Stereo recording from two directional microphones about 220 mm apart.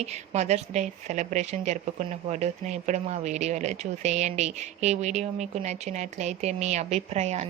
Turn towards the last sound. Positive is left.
turn(degrees=-30)  # may be behind; listen again after turning